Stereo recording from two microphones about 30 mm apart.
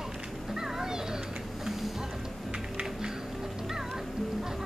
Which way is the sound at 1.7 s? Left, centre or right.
Centre.